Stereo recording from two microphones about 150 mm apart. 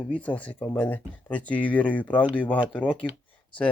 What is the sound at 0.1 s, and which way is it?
Speech, 10° left (ahead or behind).